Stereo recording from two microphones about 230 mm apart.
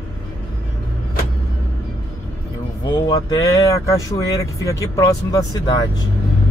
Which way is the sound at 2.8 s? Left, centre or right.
Centre.